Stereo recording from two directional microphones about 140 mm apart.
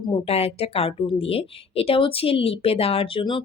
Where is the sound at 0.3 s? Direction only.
45° left (ahead or behind).